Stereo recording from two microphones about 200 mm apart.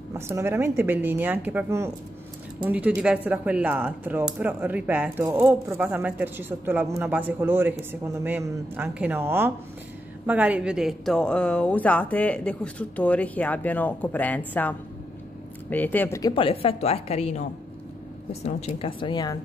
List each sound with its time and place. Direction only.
0.3 s a woman's voice: 10° right (ahead or behind); by 19.3 s 20° left (ahead or behind)